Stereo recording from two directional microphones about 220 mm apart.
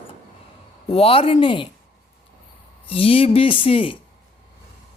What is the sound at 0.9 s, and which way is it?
Speech, 25° left (ahead or behind).